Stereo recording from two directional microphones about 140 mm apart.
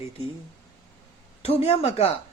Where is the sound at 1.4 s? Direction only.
45° left (ahead or behind).